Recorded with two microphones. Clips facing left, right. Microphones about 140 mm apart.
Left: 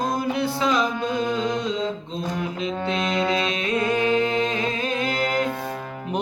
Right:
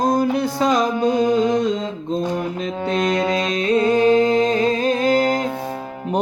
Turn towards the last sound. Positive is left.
turn(degrees=-35)  # may be behind; listen again after turning